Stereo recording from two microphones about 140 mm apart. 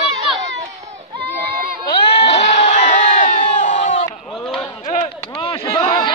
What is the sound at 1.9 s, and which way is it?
Crowd, 45° left (ahead or behind).